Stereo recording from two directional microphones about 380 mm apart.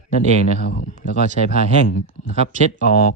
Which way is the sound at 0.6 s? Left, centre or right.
Left.